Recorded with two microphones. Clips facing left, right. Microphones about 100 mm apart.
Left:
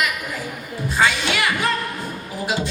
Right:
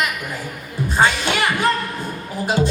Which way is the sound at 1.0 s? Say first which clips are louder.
Right 2 dB; 40° right (ahead or behind).